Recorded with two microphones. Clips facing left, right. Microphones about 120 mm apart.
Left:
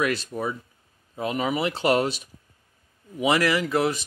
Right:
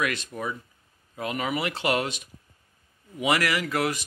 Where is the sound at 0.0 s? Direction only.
35° left (ahead or behind).